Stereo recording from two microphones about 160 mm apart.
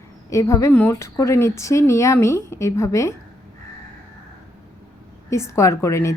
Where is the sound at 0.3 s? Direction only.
20° left (ahead or behind).